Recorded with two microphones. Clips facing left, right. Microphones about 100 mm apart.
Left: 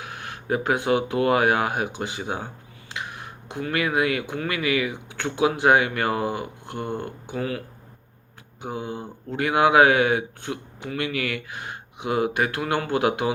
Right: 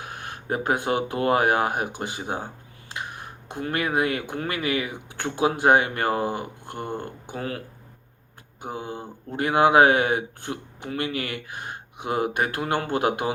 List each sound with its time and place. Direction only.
0.0 s speech: 40° right (ahead or behind)
8.7 s speech: 40° right (ahead or behind)